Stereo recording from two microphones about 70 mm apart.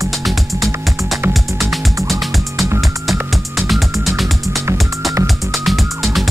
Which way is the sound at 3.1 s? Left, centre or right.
Centre.